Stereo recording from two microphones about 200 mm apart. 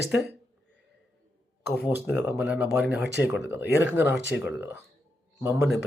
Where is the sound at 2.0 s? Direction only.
10° right (ahead or behind).